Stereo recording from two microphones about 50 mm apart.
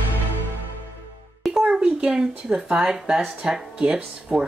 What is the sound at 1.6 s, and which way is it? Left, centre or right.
Speech, centre.